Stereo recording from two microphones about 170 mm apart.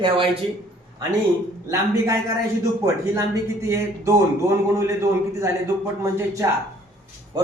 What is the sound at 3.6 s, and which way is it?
A man's voice, 15° right (ahead or behind).